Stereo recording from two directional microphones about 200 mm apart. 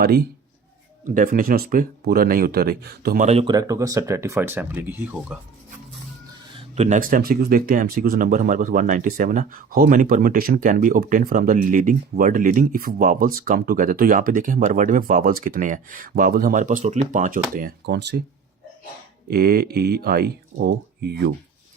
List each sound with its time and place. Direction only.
1.0 s speech: 40° right (ahead or behind)
3.2 s speech: 30° right (ahead or behind); by 5.4 s 5° right (ahead or behind)
6.7 s speech: 35° right (ahead or behind); by 18.2 s 55° right (ahead or behind)
19.3 s speech: 50° right (ahead or behind)